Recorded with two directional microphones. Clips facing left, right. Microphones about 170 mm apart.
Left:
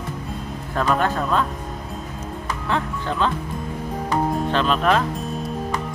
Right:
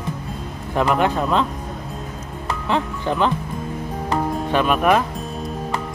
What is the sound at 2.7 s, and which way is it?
Speech, 15° right (ahead or behind).